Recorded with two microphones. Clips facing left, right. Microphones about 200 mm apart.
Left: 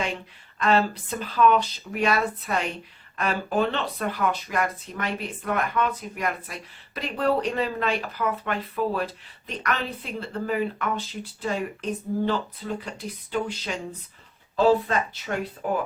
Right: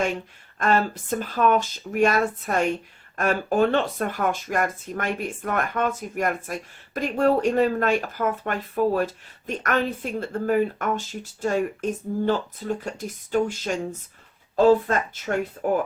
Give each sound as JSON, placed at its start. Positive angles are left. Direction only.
{"t": 0.6, "sound": "speech", "side_deg": -45}